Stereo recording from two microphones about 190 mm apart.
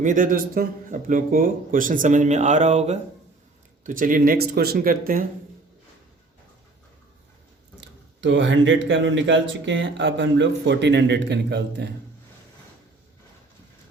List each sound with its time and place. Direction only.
0.0 s a man's voice: 45° right (ahead or behind)
7.8 s speech: 70° right (ahead or behind)